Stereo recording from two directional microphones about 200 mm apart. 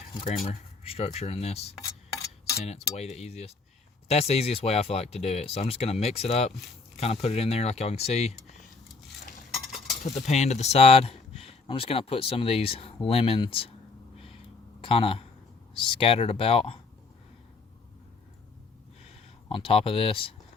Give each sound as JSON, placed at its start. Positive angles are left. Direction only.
{"t": 0.4, "sound": "speech", "side_deg": 30}
{"t": 1.8, "sound": "a sound", "side_deg": 15}
{"t": 2.6, "sound": "speech", "side_deg": 35}
{"t": 10.0, "sound": "speech", "side_deg": 35}
{"t": 14.8, "sound": "speech", "side_deg": 25}
{"t": 19.5, "sound": "speech", "side_deg": 25}